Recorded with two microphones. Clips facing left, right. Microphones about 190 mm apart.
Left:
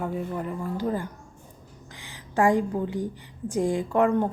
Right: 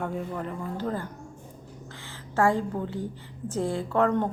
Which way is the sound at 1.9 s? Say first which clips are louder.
Right 2 dB; 15° left (ahead or behind).